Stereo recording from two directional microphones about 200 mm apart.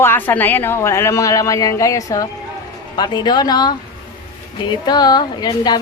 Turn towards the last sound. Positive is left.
turn(degrees=20)  # may be behind; listen again after turning